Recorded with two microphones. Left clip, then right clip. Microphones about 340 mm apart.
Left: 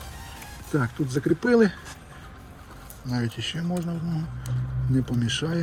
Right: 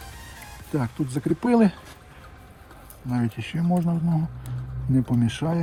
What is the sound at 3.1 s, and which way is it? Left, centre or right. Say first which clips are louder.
Speech: right 1 dB; centre.